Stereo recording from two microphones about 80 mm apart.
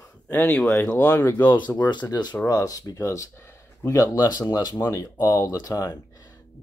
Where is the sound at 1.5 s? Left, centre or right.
Left.